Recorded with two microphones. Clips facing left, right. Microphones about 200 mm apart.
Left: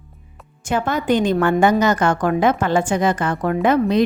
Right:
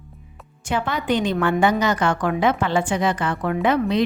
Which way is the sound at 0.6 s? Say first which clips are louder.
Left 3 dB; 45° left (ahead or behind).